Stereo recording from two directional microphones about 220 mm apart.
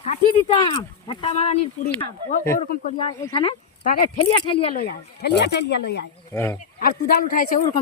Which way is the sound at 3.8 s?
40° left (ahead or behind).